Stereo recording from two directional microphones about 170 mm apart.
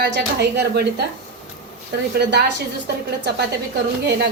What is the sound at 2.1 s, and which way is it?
Speech, 70° right (ahead or behind).